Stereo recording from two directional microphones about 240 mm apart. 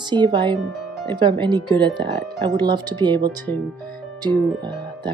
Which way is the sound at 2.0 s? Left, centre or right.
Centre.